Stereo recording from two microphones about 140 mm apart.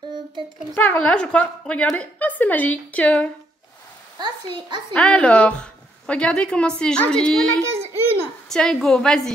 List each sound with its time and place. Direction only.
0.7 s a woman's voice: 10° left (ahead or behind)
4.2 s a child's voice: 35° right (ahead or behind)
4.9 s a woman's voice: 10° left (ahead or behind)
7.9 s a sound: 15° right (ahead or behind)
8.5 s a woman's voice: 5° left (ahead or behind)